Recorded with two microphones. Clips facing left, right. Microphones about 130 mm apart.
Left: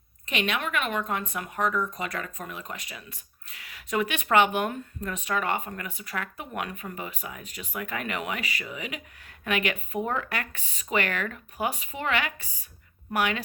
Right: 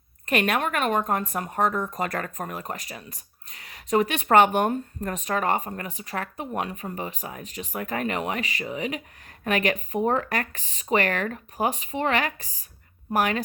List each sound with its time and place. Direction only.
0.3 s speech: 50° right (ahead or behind)